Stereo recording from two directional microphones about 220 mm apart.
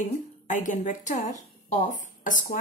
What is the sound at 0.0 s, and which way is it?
Speech, 35° left (ahead or behind).